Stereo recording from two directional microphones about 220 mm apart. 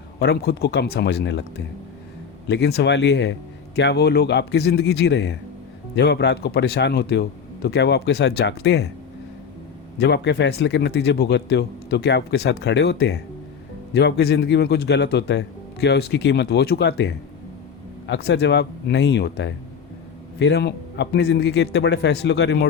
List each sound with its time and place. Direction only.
0.2 s speech: 45° left (ahead or behind)
10.0 s speech: 50° left (ahead or behind)